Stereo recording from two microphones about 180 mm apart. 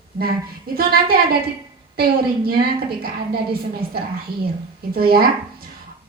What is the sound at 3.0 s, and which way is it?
A woman's voice, 55° right (ahead or behind).